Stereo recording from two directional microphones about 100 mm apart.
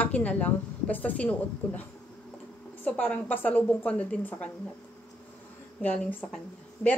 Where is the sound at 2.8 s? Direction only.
15° left (ahead or behind).